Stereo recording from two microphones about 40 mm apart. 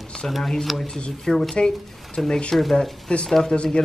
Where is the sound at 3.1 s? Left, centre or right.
Left.